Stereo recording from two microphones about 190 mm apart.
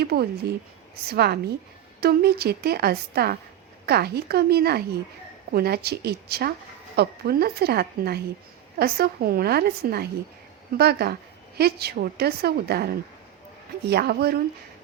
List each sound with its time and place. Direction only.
0.0 s a woman's voice: 55° right (ahead or behind)